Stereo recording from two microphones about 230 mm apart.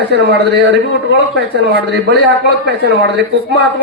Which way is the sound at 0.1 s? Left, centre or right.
Right.